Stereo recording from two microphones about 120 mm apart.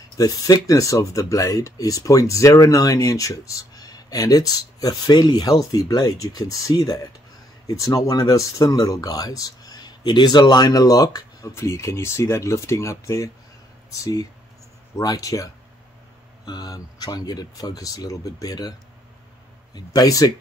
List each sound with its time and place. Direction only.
0.2 s speech: 30° left (ahead or behind)